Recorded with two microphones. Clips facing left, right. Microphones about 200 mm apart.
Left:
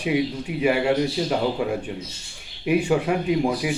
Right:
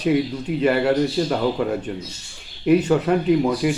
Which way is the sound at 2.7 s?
10° left (ahead or behind).